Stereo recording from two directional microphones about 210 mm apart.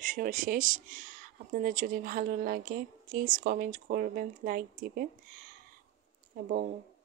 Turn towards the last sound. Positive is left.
turn(degrees=-45)  # may be behind; listen again after turning